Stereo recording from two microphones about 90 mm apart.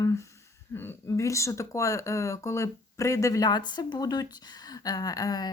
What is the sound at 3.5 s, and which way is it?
Speech, 55° left (ahead or behind).